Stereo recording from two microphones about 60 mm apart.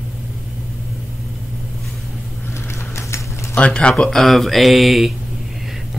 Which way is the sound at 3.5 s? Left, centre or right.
Centre.